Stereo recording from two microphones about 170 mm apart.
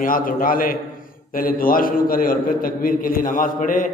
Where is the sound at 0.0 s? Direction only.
55° left (ahead or behind).